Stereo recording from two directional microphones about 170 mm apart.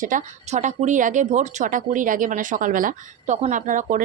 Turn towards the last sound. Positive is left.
turn(degrees=-50)  # may be behind; listen again after turning